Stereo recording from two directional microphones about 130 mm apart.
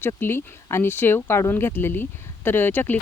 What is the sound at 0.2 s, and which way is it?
Speech, 20° left (ahead or behind).